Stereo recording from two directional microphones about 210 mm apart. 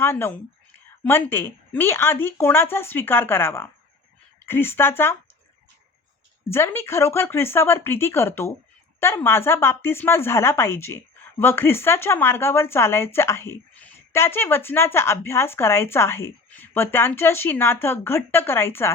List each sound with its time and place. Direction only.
0.0 s speech: 10° left (ahead or behind)
6.5 s speech: 10° left (ahead or behind)